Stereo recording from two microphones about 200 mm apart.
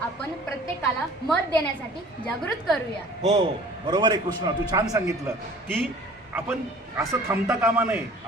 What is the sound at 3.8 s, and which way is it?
A man's voice, 20° right (ahead or behind).